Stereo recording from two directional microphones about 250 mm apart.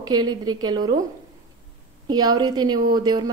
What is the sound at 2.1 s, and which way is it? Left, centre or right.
A woman's voice, centre.